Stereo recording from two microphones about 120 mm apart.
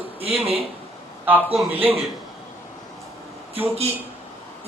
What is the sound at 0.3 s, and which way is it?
Speech, 50° right (ahead or behind).